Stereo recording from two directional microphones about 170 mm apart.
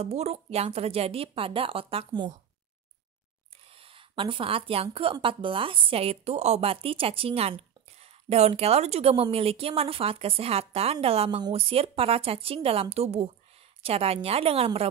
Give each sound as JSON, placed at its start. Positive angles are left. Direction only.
{"t": 0.0, "sound": "a woman's voice", "side_deg": -40}
{"t": 3.6, "sound": "a sound", "side_deg": -35}
{"t": 4.9, "sound": "a woman's voice", "side_deg": -30}